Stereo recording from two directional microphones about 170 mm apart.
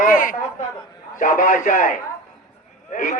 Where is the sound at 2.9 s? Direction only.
50° left (ahead or behind).